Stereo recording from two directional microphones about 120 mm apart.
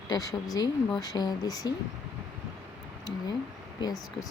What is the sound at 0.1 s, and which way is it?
Speech, 30° left (ahead or behind).